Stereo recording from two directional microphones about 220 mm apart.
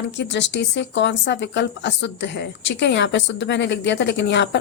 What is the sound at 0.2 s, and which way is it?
Speech, 55° left (ahead or behind).